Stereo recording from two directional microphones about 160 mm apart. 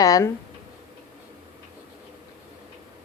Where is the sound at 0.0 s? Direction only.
20° left (ahead or behind).